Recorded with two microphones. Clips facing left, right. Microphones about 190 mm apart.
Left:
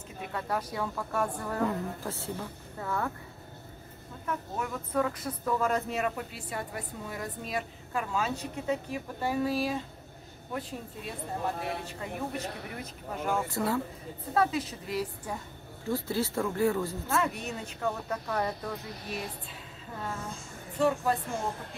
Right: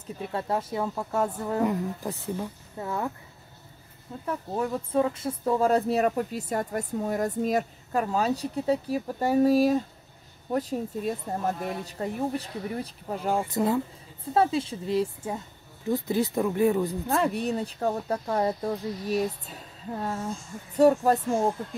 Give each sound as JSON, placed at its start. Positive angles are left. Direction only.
{"t": 0.2, "sound": "speech", "side_deg": -30}
{"t": 4.3, "sound": "speech", "side_deg": -30}
{"t": 13.5, "sound": "speech", "side_deg": -20}
{"t": 17.1, "sound": "speech", "side_deg": -35}